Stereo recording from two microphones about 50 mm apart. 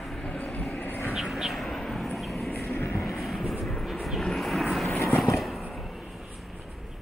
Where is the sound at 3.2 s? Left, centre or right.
Centre.